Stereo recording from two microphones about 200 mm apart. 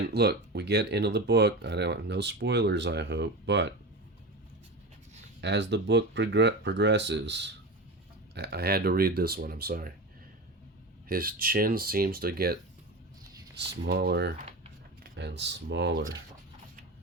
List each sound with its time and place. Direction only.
0.0 s speech: 55° right (ahead or behind)
5.4 s speech: 60° right (ahead or behind)
11.1 s speech: 45° right (ahead or behind)
13.6 s speech: 55° right (ahead or behind)